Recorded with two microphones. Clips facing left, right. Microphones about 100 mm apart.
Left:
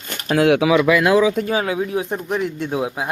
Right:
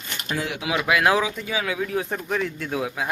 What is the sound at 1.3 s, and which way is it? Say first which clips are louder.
Speech: left 7 dB; 45° left (ahead or behind).